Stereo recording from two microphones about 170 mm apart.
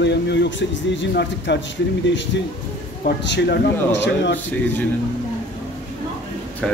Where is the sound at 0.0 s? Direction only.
90° left.